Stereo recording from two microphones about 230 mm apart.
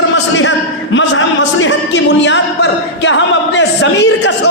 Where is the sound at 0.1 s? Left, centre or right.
Left.